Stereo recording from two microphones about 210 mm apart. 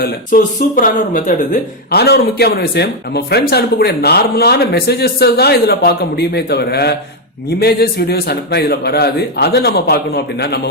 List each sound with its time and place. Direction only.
0.0 s speech: 40° left (ahead or behind)